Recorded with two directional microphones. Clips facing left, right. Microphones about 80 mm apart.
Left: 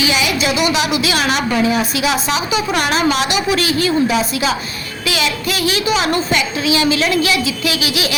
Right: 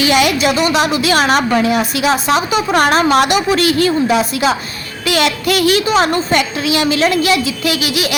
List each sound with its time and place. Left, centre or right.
0.0 s a woman's voice: right
2.2 s a woman's voice: right
5.8 s a woman's voice: right